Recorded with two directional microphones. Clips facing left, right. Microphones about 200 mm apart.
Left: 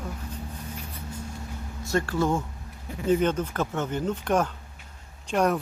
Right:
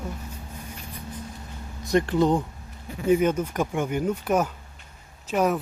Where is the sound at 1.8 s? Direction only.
15° right (ahead or behind).